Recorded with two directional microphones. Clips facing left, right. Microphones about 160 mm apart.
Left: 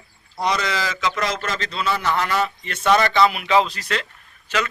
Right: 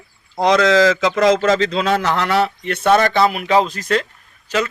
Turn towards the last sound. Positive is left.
turn(degrees=-40)  # may be behind; listen again after turning